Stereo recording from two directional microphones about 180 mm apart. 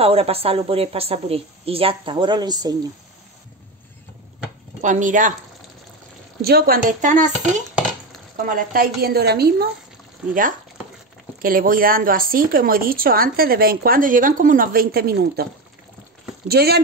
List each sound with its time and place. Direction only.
0.0 s a woman's voice: 35° right (ahead or behind)
4.8 s speech: 45° right (ahead or behind)
6.4 s a woman's voice: 55° right (ahead or behind)
11.4 s speech: 50° right (ahead or behind)
16.4 s a woman's voice: 60° right (ahead or behind)